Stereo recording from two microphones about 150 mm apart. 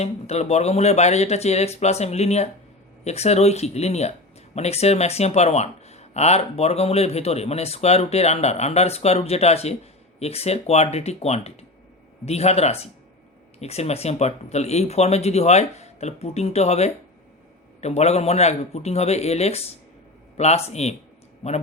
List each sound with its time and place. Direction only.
0.0 s speech: 45° left (ahead or behind)